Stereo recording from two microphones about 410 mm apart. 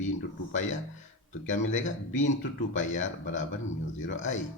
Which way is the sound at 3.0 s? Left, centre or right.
Left.